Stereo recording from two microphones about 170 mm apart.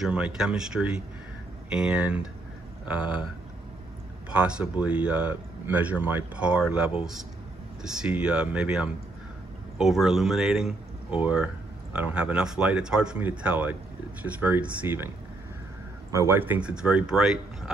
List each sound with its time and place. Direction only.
0.0 s speech: 5° right (ahead or behind)
4.3 s speech: 5° right (ahead or behind)
16.1 s speech: 15° right (ahead or behind)